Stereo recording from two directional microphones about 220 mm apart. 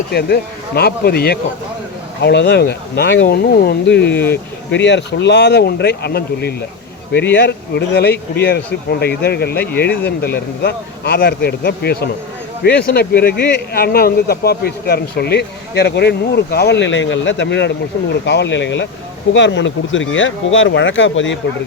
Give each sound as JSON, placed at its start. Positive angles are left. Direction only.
{"t": 0.1, "sound": "speech", "side_deg": 45}
{"t": 4.1, "sound": "speech", "side_deg": 10}
{"t": 4.7, "sound": "speech", "side_deg": 55}